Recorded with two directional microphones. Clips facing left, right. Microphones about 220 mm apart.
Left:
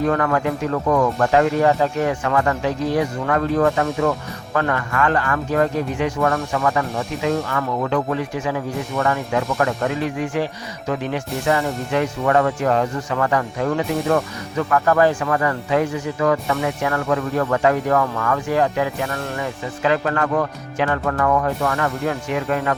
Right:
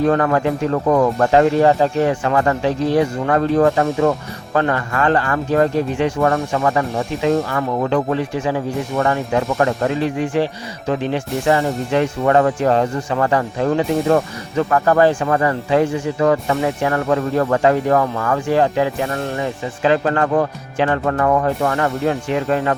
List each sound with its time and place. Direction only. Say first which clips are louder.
0.0 s speech: right 3 dB; 30° right (ahead or behind)